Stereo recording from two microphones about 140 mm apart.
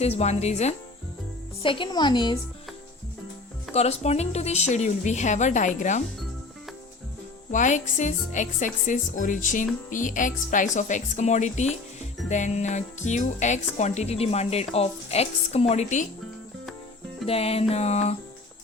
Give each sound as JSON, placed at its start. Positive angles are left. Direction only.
{"t": 0.0, "sound": "a woman's voice", "side_deg": 50}
{"t": 1.6, "sound": "a woman's voice", "side_deg": 35}
{"t": 3.7, "sound": "a woman's voice", "side_deg": 50}
{"t": 7.5, "sound": "a woman's voice", "side_deg": 60}
{"t": 17.2, "sound": "a woman's voice", "side_deg": 45}